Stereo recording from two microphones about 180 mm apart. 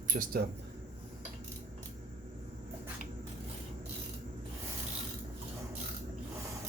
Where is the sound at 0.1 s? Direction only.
50° right (ahead or behind).